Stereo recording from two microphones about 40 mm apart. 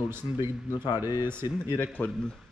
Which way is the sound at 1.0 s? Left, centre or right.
Right.